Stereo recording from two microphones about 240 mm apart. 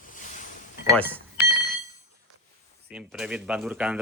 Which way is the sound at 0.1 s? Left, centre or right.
Left.